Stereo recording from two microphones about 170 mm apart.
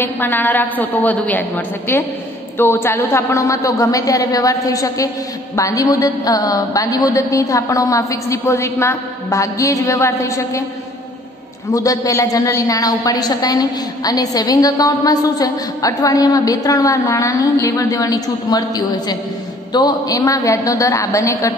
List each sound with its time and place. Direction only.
0.0 s a woman's voice: 10° left (ahead or behind)
2.5 s a woman's voice: 15° left (ahead or behind)
11.7 s a woman's voice: 20° left (ahead or behind)
19.7 s a woman's voice: 25° left (ahead or behind)